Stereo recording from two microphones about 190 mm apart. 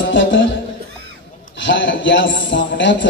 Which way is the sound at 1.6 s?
75° left (ahead or behind).